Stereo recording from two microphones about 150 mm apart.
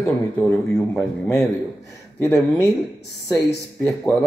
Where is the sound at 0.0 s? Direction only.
15° left (ahead or behind).